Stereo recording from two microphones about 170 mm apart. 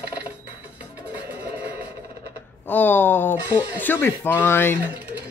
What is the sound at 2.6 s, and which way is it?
Speech, 10° left (ahead or behind).